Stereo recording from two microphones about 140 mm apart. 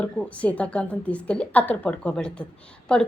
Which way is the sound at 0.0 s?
10° left (ahead or behind).